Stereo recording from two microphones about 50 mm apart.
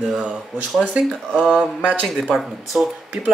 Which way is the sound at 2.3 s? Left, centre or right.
Centre.